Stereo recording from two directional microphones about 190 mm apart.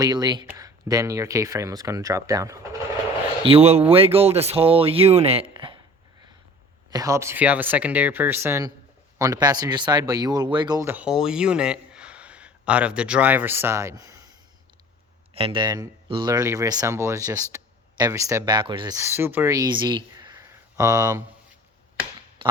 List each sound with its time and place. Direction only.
0.0 s speech: 20° right (ahead or behind)
3.4 s speech: 30° right (ahead or behind)
6.9 s speech: 15° right (ahead or behind)
15.4 s speech: 30° right (ahead or behind)
22.4 s a sound: 25° right (ahead or behind)